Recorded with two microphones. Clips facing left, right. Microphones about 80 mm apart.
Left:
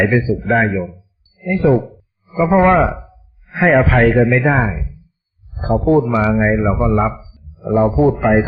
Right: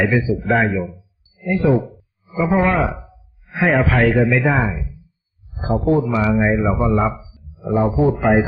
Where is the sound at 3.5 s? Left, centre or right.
Left.